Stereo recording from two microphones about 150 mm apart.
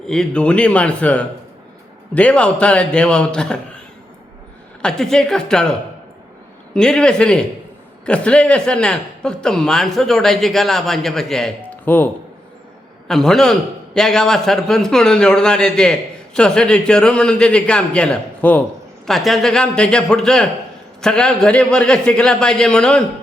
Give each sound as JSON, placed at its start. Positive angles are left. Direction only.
{"t": 0.1, "sound": "a man's voice", "side_deg": 5}
{"t": 4.8, "sound": "a man's voice", "side_deg": 5}
{"t": 6.7, "sound": "a man's voice", "side_deg": 5}
{"t": 13.1, "sound": "a man's voice", "side_deg": 0}